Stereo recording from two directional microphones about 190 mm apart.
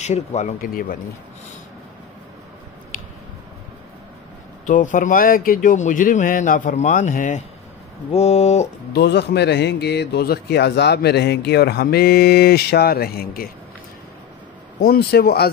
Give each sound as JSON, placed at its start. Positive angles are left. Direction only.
{"t": 0.0, "sound": "speech", "side_deg": 35}
{"t": 2.9, "sound": "a sound", "side_deg": 45}
{"t": 4.6, "sound": "speech", "side_deg": 40}
{"t": 8.9, "sound": "a man's voice", "side_deg": 60}
{"t": 14.8, "sound": "a man's voice", "side_deg": 55}